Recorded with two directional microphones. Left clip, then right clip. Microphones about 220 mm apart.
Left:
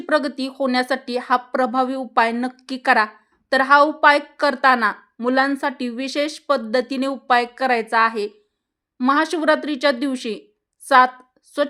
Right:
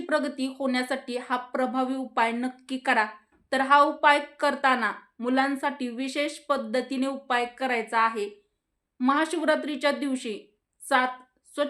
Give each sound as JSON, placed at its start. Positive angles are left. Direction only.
{"t": 0.0, "sound": "a woman's voice", "side_deg": 40}